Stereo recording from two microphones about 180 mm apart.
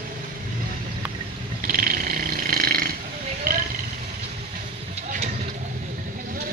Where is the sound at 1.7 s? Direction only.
55° right (ahead or behind).